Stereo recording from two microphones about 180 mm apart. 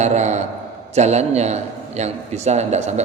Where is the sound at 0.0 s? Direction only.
40° right (ahead or behind).